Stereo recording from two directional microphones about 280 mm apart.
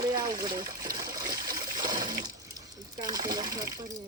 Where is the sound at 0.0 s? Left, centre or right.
Centre.